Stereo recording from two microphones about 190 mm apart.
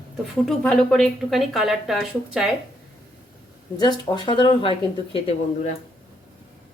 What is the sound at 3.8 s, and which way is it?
Speech, 20° left (ahead or behind).